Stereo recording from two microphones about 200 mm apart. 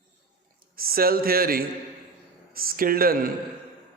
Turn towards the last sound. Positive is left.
turn(degrees=-45)  # may be behind; listen again after turning